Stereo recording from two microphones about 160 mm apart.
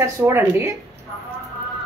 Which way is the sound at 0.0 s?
15° right (ahead or behind).